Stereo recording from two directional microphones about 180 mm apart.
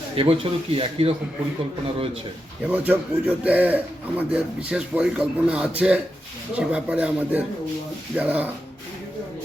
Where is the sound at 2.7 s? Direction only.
10° right (ahead or behind).